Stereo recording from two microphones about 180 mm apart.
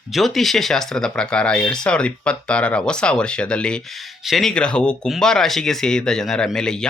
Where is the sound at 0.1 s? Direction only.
Centre (ahead or behind).